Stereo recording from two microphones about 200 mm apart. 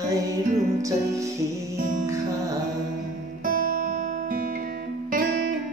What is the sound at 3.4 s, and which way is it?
Guitar, 40° right (ahead or behind).